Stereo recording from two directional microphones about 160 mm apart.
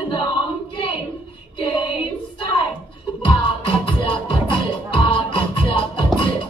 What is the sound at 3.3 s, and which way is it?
Music, 30° left (ahead or behind).